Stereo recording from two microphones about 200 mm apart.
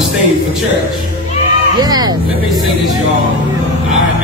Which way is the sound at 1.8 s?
20° right (ahead or behind).